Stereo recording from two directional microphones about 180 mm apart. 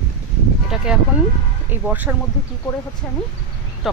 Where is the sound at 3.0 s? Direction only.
5° left (ahead or behind).